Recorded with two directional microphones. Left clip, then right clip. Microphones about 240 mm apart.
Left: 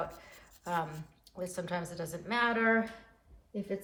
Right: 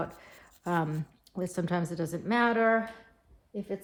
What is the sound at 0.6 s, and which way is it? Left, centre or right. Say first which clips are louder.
Speech: right 4 dB; right.